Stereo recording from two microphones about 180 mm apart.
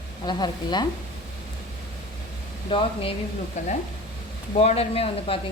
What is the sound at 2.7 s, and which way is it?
Speech, 30° left (ahead or behind).